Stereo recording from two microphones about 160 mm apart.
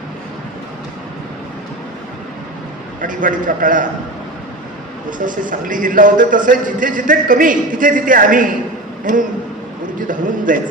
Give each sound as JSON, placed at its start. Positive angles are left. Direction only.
{"t": 3.0, "sound": "a man's voice", "side_deg": -55}
{"t": 5.1, "sound": "a man's voice", "side_deg": -55}
{"t": 10.0, "sound": "a man's voice", "side_deg": -55}